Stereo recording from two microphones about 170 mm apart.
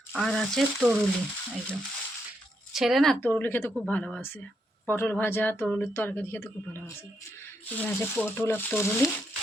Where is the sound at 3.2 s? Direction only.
10° left (ahead or behind).